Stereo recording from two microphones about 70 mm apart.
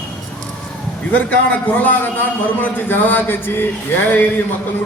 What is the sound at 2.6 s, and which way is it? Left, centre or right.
A man's voice, left.